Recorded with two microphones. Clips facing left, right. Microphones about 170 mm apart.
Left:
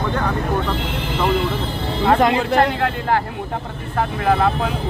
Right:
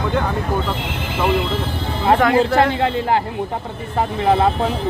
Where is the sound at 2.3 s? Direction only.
20° right (ahead or behind).